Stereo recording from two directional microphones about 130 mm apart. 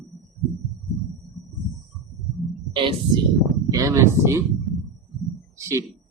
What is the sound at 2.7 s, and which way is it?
Speech, 40° right (ahead or behind).